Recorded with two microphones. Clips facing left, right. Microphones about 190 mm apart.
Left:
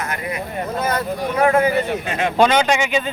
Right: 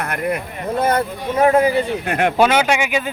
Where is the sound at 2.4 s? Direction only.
10° right (ahead or behind).